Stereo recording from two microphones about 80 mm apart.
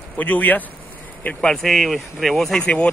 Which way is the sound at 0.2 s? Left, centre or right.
Centre.